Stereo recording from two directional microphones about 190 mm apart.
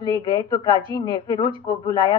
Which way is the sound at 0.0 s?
20° left (ahead or behind).